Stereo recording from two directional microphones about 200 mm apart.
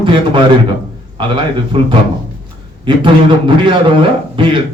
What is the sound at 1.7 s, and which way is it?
A man's voice, 25° right (ahead or behind).